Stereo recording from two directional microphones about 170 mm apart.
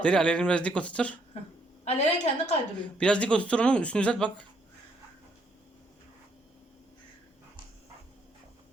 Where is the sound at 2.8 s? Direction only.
5° left (ahead or behind).